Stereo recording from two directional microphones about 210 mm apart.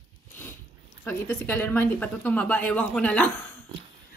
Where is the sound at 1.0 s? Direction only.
10° left (ahead or behind).